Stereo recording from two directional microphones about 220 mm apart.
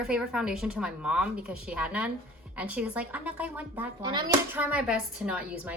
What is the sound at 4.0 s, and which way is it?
Speech, 20° right (ahead or behind).